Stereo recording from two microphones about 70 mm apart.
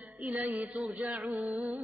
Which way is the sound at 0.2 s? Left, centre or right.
Centre.